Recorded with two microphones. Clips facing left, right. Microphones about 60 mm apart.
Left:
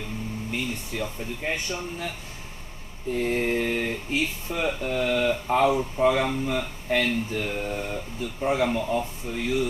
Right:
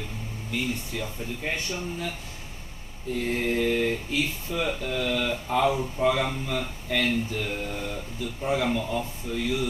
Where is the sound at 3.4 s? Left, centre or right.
Left.